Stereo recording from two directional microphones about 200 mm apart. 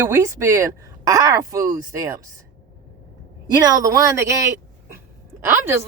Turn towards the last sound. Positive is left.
turn(degrees=-10)  # may be behind; listen again after turning